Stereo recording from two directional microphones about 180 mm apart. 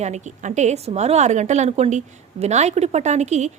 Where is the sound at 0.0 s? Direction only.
40° right (ahead or behind).